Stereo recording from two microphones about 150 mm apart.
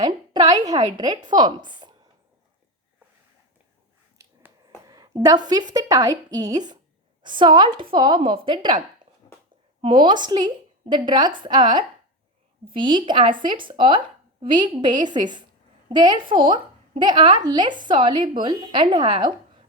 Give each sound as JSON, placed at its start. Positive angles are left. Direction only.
{"t": 0.0, "sound": "a woman's voice", "side_deg": -25}
{"t": 4.9, "sound": "a woman's voice", "side_deg": -25}
{"t": 9.8, "sound": "a woman's voice", "side_deg": -30}